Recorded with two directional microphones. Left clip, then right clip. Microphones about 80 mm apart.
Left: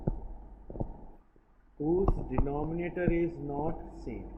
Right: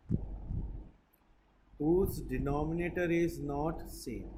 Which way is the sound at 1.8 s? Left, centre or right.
Right.